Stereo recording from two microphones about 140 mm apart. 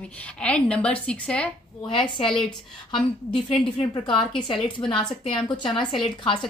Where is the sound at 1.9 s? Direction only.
40° left (ahead or behind).